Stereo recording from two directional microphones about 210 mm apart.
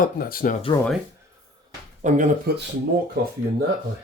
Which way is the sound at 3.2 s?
50° right (ahead or behind).